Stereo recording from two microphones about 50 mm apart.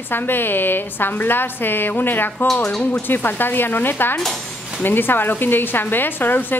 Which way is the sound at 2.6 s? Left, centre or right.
Centre.